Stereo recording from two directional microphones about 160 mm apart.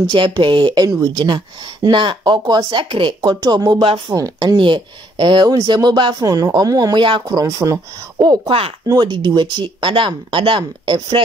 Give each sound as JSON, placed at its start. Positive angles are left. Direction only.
{"t": 0.0, "sound": "speech", "side_deg": -30}